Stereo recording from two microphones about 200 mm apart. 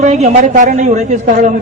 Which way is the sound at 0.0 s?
35° right (ahead or behind).